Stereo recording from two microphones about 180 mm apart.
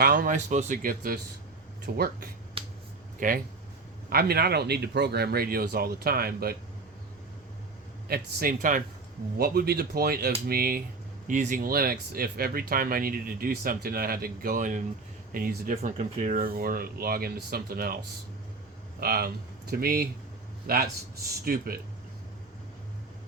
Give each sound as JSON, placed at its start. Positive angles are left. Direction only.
{"t": 0.0, "sound": "speech", "side_deg": -50}
{"t": 2.6, "sound": "finger snapping", "side_deg": -30}
{"t": 3.2, "sound": "speech", "side_deg": -50}
{"t": 4.1, "sound": "speech", "side_deg": -60}
{"t": 8.0, "sound": "speech", "side_deg": -55}
{"t": 11.3, "sound": "speech", "side_deg": -45}
{"t": 15.7, "sound": "speech", "side_deg": -40}